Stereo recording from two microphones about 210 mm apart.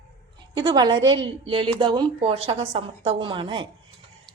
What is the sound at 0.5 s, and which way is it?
A woman's voice, 20° right (ahead or behind).